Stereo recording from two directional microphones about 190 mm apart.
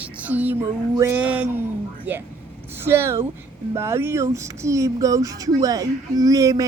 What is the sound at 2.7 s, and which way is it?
A child's voice, 10° right (ahead or behind).